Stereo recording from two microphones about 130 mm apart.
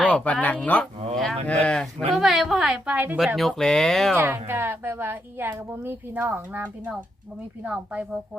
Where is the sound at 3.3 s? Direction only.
Centre (ahead or behind).